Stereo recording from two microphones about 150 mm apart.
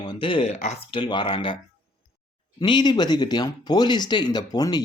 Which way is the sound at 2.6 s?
30° left (ahead or behind).